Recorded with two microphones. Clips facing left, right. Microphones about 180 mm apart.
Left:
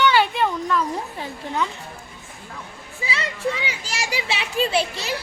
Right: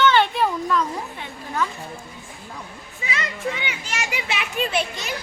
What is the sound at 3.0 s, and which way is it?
A child's voice, 30° left (ahead or behind).